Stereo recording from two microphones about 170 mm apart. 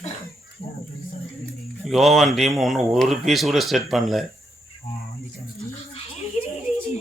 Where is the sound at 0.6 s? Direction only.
35° left (ahead or behind).